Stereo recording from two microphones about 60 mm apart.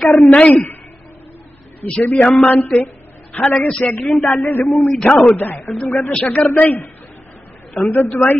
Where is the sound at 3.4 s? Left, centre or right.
Left.